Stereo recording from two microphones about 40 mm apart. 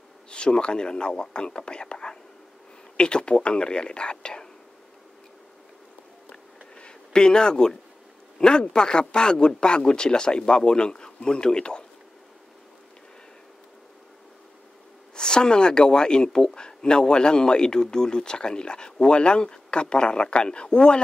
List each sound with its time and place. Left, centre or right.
0.3 s speech: left
6.8 s a sound: left
8.4 s speech: left
15.1 s speech: left